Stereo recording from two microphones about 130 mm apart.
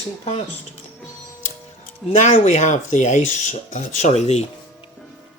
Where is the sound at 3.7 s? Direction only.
60° left (ahead or behind).